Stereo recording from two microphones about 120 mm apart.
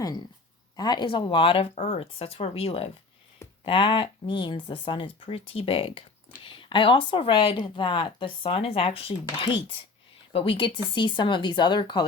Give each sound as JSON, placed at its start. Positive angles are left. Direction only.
{"t": 0.8, "sound": "speech", "side_deg": 40}